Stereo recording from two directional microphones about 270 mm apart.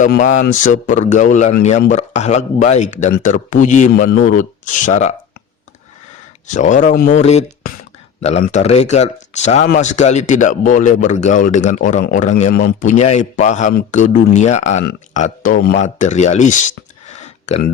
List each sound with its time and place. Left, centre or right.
0.0 s speech: left
6.5 s speech: left
17.2 s a sound: left